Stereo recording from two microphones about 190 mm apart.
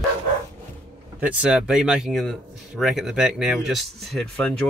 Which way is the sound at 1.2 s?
5° right (ahead or behind).